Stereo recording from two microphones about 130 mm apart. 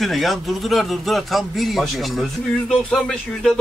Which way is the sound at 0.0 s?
Centre (ahead or behind).